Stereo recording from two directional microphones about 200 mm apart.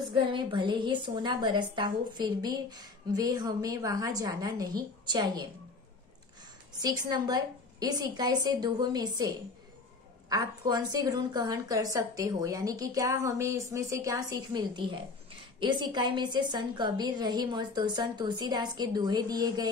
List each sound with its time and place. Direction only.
0.3 s a woman's voice: 25° right (ahead or behind)
6.8 s a woman's voice: 20° right (ahead or behind)
10.3 s a woman's voice: 20° right (ahead or behind)